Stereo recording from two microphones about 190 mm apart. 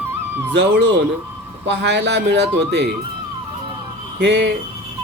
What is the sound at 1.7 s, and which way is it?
Speech, 60° right (ahead or behind).